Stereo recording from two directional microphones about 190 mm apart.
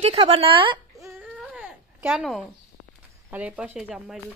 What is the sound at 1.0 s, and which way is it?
Baby cry, 10° right (ahead or behind).